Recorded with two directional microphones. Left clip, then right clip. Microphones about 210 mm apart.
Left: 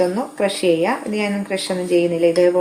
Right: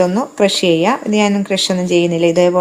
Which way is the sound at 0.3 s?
45° right (ahead or behind).